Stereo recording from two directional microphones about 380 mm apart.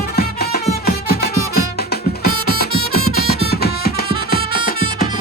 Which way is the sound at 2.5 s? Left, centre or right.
Left.